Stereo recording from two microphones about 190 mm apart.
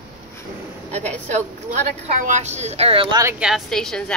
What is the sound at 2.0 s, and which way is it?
A woman's voice, 40° right (ahead or behind).